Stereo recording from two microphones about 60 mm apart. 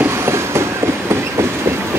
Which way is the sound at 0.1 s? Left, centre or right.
Right.